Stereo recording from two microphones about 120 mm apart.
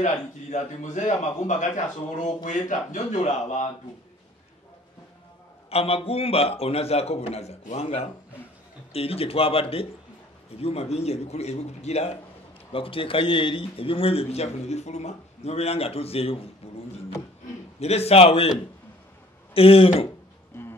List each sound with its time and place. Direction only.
0.0 s a man's voice: 85° left
5.7 s a man's voice: 55° left (ahead or behind)
12.7 s a man's voice: 50° left (ahead or behind)
17.7 s a man's voice: 60° left (ahead or behind)
19.5 s speech: 50° left (ahead or behind)
20.5 s music: 20° left (ahead or behind)